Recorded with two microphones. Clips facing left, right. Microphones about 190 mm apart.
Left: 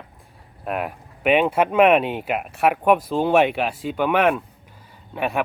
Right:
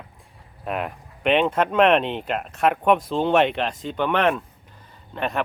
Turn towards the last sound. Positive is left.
turn(degrees=10)  # may be behind; listen again after turning